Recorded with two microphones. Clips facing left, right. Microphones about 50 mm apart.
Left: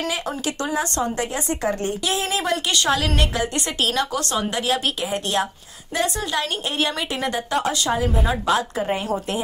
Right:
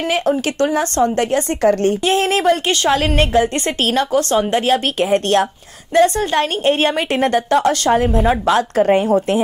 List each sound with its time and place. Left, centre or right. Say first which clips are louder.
0.6 s a woman's voice: right 8 dB; right
2.4 s a woman's voice: right 6 dB; right
5.0 s speech: right 8 dB; right
5.9 s a woman's voice: right 10 dB; right